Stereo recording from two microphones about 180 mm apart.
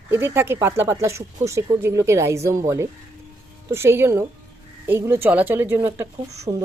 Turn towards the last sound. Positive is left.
turn(degrees=-25)  # may be behind; listen again after turning